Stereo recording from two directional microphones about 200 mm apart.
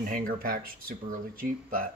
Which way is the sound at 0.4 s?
45° right (ahead or behind).